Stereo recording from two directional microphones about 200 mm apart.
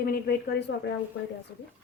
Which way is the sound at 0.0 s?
50° left (ahead or behind).